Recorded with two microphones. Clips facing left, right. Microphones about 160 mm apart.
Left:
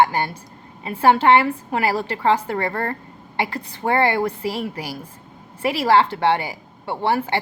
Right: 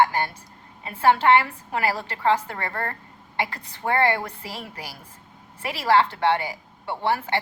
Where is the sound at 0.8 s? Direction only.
25° left (ahead or behind).